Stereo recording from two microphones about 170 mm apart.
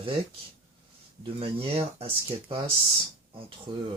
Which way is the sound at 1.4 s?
35° right (ahead or behind).